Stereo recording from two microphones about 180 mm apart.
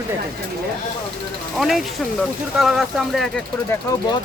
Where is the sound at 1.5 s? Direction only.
Centre (ahead or behind).